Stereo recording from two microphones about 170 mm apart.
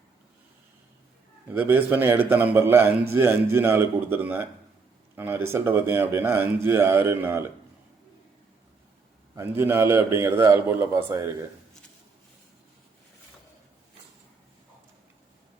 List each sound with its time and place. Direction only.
1.5 s speech: 10° right (ahead or behind)
9.3 s speech: 15° right (ahead or behind)